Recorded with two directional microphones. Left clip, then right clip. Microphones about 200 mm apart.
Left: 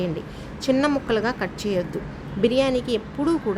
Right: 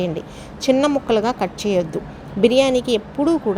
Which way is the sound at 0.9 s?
10° right (ahead or behind).